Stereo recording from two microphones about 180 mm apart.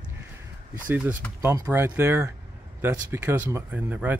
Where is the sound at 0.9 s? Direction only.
10° right (ahead or behind).